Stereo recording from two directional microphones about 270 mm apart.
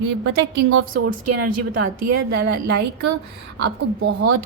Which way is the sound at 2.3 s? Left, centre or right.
Right.